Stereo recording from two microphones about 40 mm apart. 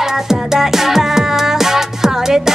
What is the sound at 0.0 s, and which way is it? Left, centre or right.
Music, centre.